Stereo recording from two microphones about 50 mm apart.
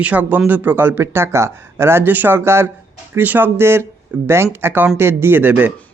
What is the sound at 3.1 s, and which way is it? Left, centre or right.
Speech, right.